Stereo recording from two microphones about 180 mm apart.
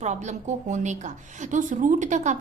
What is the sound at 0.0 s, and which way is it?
A woman's voice, 40° right (ahead or behind).